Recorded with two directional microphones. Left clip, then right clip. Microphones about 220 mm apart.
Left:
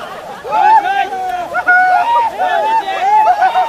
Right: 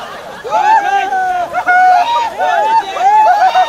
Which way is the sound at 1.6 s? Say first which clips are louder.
Right 1 dB; 50° right (ahead or behind).